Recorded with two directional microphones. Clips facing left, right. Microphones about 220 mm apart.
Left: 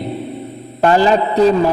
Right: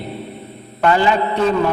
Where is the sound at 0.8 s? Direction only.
35° left (ahead or behind).